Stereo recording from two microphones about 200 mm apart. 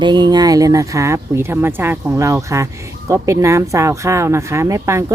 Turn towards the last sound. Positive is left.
turn(degrees=-15)  # may be behind; listen again after turning